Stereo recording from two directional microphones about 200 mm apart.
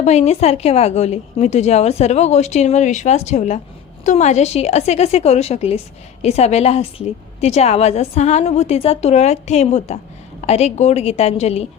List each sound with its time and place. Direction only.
0.0 s a woman's voice: 35° left (ahead or behind)